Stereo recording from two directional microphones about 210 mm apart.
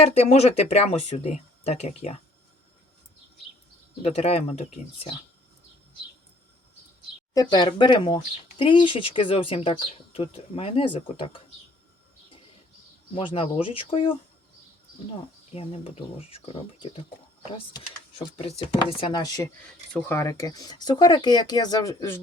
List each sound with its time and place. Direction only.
0.1 s speech: 30° left (ahead or behind)
4.0 s speech: 30° left (ahead or behind)
7.3 s speech: 20° left (ahead or behind)
13.1 s speech: 25° left (ahead or behind)
15.5 s speech: 25° left (ahead or behind)